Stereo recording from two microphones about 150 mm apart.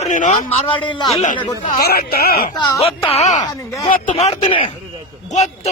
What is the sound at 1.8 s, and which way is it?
Speech, 90° left.